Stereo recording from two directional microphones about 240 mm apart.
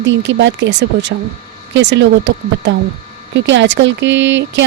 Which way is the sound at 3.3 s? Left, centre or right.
Right.